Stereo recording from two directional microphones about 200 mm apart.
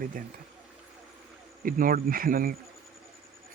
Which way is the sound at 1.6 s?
45° right (ahead or behind).